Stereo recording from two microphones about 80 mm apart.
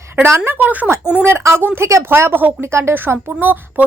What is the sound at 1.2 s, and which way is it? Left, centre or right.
A woman's voice, right.